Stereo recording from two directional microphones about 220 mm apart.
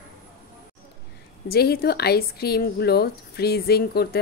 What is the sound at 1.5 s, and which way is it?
Speech, 45° left (ahead or behind).